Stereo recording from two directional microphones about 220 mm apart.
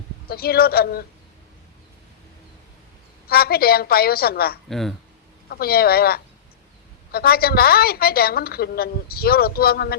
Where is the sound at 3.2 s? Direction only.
45° left (ahead or behind).